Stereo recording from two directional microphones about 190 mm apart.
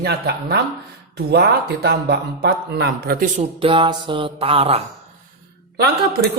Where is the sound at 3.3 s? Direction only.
25° right (ahead or behind).